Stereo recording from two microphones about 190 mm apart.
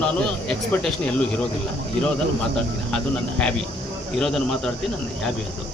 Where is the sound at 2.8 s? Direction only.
5° left (ahead or behind).